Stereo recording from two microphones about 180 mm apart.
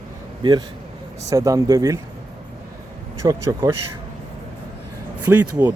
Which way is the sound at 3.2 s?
20° right (ahead or behind).